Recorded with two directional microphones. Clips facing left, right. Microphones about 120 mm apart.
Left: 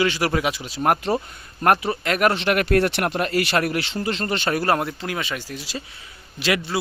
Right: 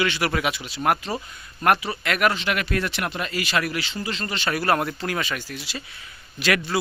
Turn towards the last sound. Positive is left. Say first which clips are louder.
# even
turn(degrees=25)  # may be behind; listen again after turning